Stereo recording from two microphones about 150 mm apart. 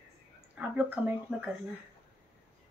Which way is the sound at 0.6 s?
10° right (ahead or behind).